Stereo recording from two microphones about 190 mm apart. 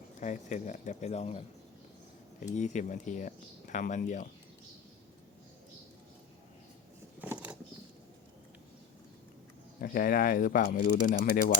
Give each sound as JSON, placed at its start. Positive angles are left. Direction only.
{"t": 0.2, "sound": "speech", "side_deg": 40}
{"t": 7.2, "sound": "a sound", "side_deg": -10}
{"t": 9.8, "sound": "speech", "side_deg": 50}